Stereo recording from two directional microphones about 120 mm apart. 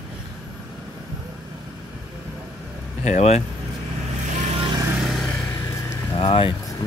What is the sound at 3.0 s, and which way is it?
Speech, 75° left (ahead or behind).